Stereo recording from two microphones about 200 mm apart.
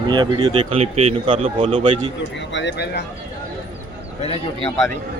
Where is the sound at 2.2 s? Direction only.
60° left (ahead or behind).